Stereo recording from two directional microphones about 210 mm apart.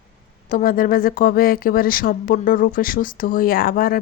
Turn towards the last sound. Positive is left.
turn(degrees=45)  # may be behind; listen again after turning